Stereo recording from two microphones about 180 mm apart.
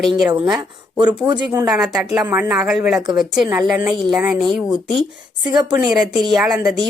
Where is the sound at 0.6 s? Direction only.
25° right (ahead or behind).